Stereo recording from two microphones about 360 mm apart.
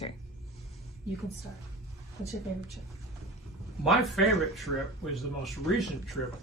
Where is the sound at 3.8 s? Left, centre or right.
Centre.